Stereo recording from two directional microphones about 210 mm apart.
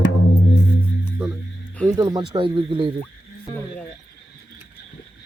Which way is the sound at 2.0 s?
20° right (ahead or behind).